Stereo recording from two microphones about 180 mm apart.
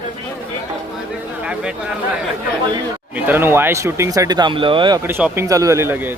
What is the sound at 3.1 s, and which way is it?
Speech, 10° right (ahead or behind).